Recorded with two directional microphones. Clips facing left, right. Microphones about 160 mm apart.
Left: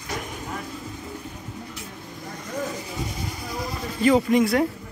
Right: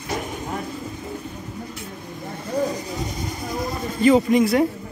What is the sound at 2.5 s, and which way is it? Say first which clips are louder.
Sheep: right 7 dB; 35° right (ahead or behind).